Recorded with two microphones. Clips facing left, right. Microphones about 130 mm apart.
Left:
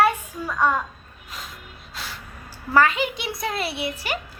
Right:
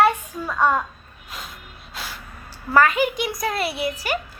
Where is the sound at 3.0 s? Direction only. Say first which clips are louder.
Right 4 dB; 45° right (ahead or behind).